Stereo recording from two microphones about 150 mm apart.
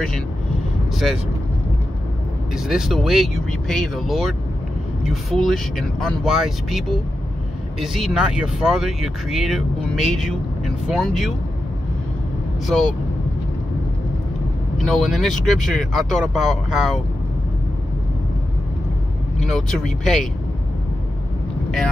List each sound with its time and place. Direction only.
2.5 s speech: 5° right (ahead or behind)
14.9 s speech: centre (ahead or behind)
19.5 s speech: 5° left (ahead or behind)